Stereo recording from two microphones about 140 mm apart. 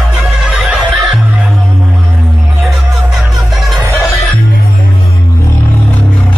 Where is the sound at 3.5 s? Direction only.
Centre (ahead or behind).